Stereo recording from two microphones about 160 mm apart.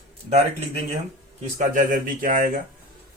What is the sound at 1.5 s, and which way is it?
Speech, 55° right (ahead or behind).